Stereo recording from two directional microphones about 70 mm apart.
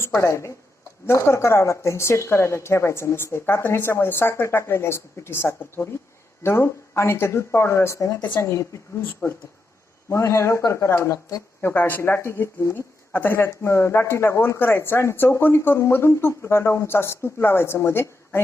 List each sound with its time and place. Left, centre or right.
0.0 s a man's voice: left